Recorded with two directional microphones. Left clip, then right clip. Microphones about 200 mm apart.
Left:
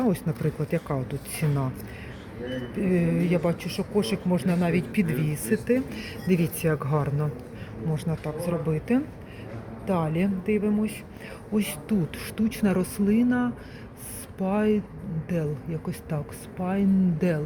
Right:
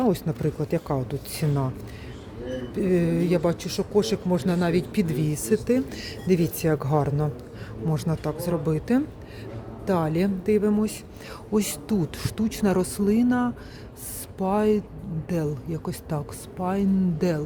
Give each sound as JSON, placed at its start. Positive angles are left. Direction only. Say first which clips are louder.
{"t": 0.0, "sound": "a woman's voice", "louder": "right 3 dB", "side_deg": -15}
{"t": 2.7, "sound": "speech", "louder": "right 3 dB", "side_deg": -20}
{"t": 7.9, "sound": "speech", "louder": "right 3 dB", "side_deg": -30}